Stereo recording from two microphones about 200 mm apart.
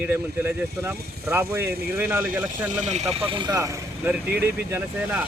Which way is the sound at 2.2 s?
40° right (ahead or behind).